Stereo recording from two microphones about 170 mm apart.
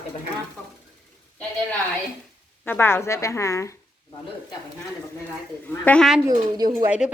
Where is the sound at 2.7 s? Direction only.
10° left (ahead or behind).